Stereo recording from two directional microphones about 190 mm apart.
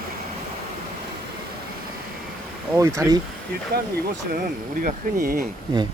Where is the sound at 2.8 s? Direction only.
15° right (ahead or behind).